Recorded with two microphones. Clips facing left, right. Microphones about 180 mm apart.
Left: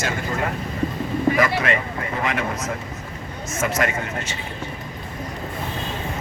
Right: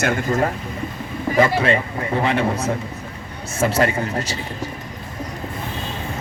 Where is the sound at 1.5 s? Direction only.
30° right (ahead or behind).